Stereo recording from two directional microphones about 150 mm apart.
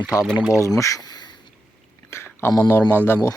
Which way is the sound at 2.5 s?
20° left (ahead or behind).